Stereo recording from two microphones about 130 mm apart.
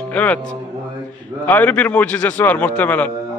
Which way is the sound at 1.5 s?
15° left (ahead or behind).